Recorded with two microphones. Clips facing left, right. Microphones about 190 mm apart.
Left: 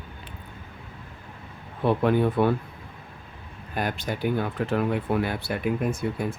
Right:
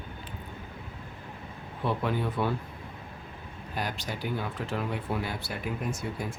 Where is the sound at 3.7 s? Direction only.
55° left (ahead or behind).